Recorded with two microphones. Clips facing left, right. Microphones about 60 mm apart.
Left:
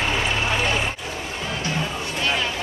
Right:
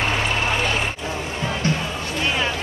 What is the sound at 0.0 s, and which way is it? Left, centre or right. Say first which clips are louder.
Vehicle: right 1 dB; right.